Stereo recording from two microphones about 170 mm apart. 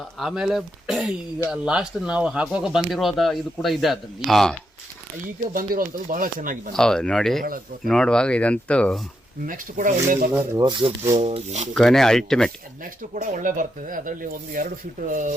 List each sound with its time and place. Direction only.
0.2 s speech: centre (ahead or behind)
5.5 s speech: 55° right (ahead or behind)
6.7 s speech: 5° left (ahead or behind)
9.5 s speech: 50° right (ahead or behind)
10.6 s speech: 25° right (ahead or behind)
11.2 s speech: 40° right (ahead or behind)
11.7 s speech: centre (ahead or behind)
12.8 s speech: 50° right (ahead or behind)